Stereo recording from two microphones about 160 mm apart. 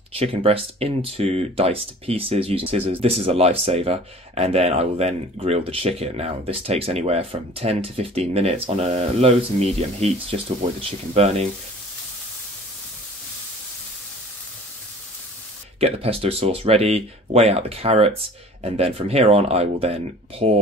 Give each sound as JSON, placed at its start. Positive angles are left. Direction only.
{"t": 0.2, "sound": "speech", "side_deg": -40}
{"t": 15.8, "sound": "speech", "side_deg": -40}